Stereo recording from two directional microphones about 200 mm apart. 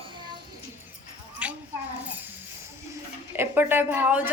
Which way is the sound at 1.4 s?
5° right (ahead or behind).